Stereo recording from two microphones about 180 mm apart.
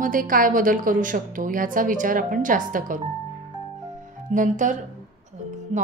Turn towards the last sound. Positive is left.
turn(degrees=-45)  # may be behind; listen again after turning